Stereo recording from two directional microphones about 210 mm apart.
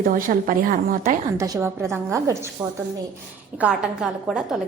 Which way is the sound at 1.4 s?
10° right (ahead or behind).